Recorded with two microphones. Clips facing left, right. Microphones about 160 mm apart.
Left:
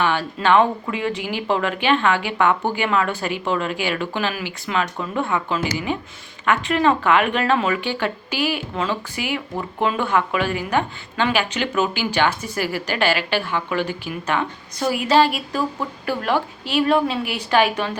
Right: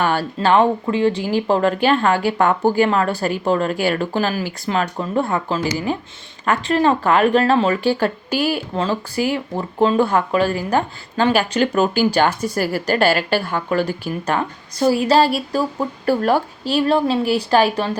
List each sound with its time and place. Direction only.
0.0 s speech: 40° right (ahead or behind)